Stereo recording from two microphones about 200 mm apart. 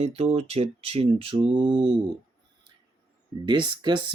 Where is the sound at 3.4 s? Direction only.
20° right (ahead or behind).